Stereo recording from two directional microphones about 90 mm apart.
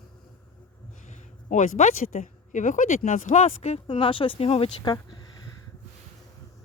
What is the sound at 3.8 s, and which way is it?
Speech, 80° left.